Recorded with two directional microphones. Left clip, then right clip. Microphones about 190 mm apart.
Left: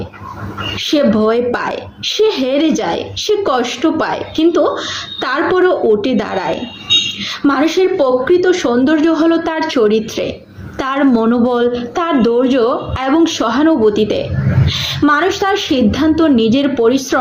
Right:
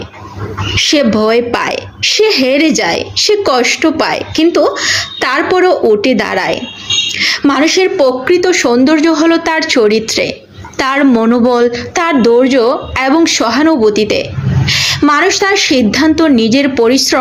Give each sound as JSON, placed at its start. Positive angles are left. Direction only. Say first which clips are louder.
{"t": 0.8, "sound": "a woman's voice", "louder": "right 3 dB", "side_deg": -20}